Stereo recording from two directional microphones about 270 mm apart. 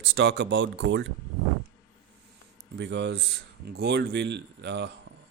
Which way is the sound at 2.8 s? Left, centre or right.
Right.